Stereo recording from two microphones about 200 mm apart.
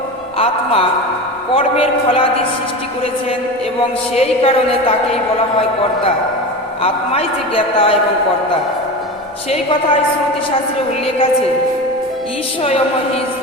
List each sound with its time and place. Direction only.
0.3 s a woman's voice: 30° left (ahead or behind)
4.1 s a woman's voice: 30° left (ahead or behind)
6.8 s a woman's voice: 30° left (ahead or behind)
9.5 s a woman's voice: 25° left (ahead or behind)